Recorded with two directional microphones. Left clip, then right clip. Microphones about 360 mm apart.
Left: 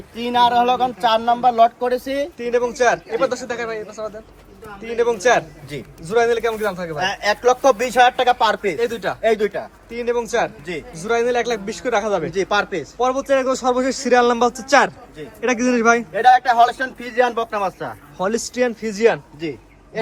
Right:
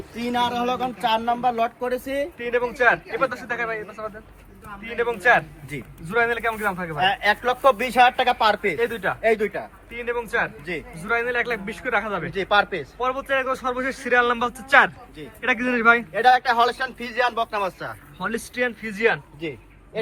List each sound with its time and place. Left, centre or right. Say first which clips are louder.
0.3 s speech: left 8 dB; centre
2.1 s speech: left 4 dB; centre
7.0 s speech: left 2 dB; left
8.8 s speech: left 2 dB; centre
9.2 s speech: left 4 dB; left
9.9 s speech: left 5 dB; centre
12.3 s speech: left 1 dB; left
13.0 s speech: left 6 dB; centre
16.1 s speech: left 4 dB; left
18.2 s speech: left 6 dB; centre
19.4 s a sound: left 4 dB; left